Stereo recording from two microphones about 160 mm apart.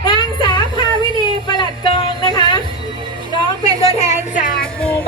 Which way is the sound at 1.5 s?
25° left (ahead or behind).